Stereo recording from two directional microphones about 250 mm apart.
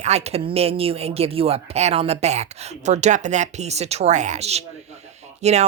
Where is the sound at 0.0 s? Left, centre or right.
Right.